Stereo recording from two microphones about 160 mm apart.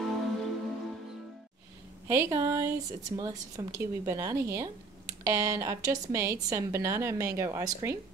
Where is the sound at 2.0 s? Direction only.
20° right (ahead or behind).